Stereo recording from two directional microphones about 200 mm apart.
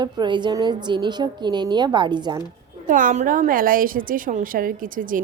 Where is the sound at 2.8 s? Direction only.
40° right (ahead or behind).